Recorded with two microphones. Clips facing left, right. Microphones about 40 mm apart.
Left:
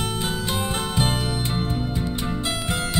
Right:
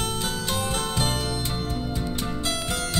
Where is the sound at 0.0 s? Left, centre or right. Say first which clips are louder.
Left 2 dB; centre.